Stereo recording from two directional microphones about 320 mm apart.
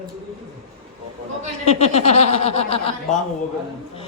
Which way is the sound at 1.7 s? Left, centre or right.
Centre.